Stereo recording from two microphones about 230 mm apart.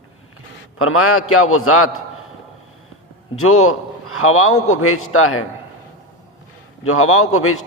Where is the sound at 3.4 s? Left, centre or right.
Left.